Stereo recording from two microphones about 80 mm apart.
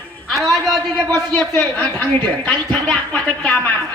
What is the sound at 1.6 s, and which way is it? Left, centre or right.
A woman's voice, left.